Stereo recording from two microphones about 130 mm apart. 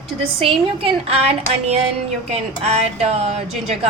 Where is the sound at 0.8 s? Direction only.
55° right (ahead or behind).